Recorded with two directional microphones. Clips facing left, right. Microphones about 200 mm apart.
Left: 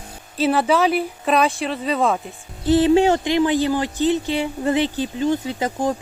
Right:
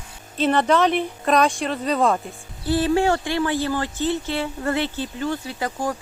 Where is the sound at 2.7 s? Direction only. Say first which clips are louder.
Left 5 dB; 20° left (ahead or behind).